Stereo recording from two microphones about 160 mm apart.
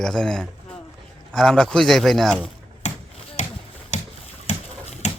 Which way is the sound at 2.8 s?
45° left (ahead or behind).